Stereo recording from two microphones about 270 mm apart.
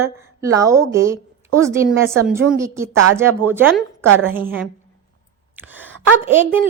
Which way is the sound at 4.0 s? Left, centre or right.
Right.